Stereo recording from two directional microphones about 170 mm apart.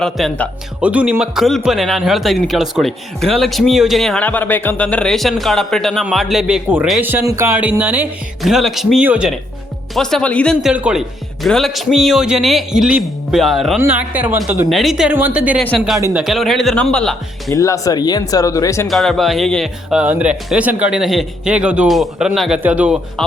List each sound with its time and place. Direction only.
0.0 s speech: centre (ahead or behind)
17.5 s speech: 20° left (ahead or behind)
18.9 s speech: centre (ahead or behind)